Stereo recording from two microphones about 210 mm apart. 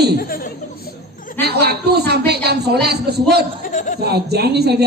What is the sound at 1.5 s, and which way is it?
A woman's voice, 50° right (ahead or behind).